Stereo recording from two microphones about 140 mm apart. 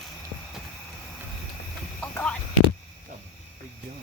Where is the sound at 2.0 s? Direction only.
10° left (ahead or behind).